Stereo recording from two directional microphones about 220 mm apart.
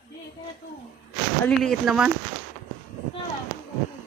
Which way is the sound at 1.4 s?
Centre (ahead or behind).